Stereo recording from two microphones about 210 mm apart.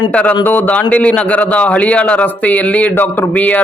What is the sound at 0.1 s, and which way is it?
A man's voice, 5° left (ahead or behind).